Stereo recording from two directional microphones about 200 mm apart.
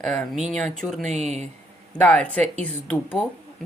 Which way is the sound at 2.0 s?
5° left (ahead or behind).